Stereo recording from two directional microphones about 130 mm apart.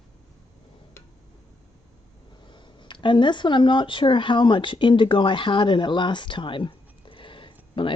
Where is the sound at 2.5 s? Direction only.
40° left (ahead or behind).